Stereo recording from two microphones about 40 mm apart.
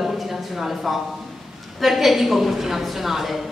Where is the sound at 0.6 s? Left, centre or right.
Centre.